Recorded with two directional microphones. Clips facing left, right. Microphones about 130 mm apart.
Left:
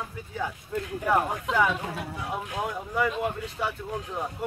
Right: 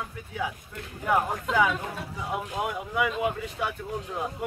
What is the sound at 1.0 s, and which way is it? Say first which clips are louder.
Speech: right 1 dB; 5° right (ahead or behind).